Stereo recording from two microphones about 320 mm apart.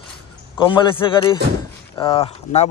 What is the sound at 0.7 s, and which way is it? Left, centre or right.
A man's voice, centre.